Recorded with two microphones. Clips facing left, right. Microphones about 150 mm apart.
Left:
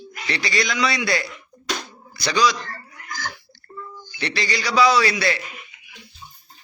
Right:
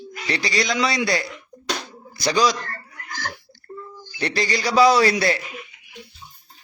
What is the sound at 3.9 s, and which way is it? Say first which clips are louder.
A man's voice: right 3 dB; 45° right (ahead or behind).